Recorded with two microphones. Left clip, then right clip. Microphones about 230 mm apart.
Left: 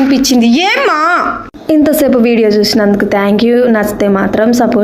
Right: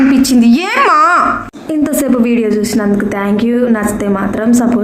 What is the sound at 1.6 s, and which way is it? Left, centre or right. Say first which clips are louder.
A woman's voice: left 6 dB; left.